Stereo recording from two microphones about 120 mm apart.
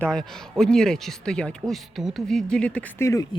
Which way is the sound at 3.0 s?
25° left (ahead or behind).